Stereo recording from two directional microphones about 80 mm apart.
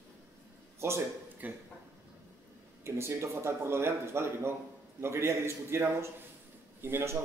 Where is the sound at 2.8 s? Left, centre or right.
Right.